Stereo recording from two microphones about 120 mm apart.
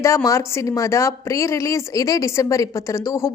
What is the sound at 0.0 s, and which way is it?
A woman's voice, 25° left (ahead or behind).